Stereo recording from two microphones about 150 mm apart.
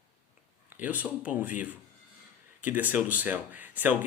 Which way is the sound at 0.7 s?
10° right (ahead or behind).